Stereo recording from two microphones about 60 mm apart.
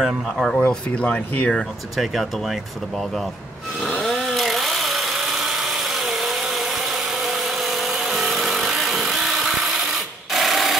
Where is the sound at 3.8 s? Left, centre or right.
Centre.